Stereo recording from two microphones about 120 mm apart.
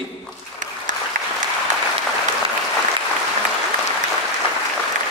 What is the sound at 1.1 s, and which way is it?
Applause, 90° right.